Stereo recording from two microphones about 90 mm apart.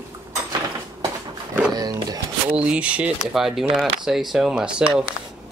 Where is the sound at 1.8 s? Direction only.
45° right (ahead or behind).